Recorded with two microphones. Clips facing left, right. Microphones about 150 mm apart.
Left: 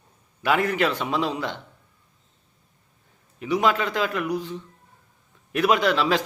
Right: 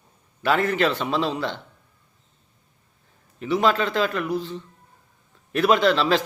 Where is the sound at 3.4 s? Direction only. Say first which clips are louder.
Right 1 dB; 15° left (ahead or behind).